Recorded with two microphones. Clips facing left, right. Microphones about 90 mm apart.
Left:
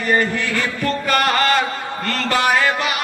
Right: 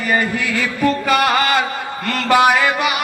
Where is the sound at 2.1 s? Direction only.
15° right (ahead or behind).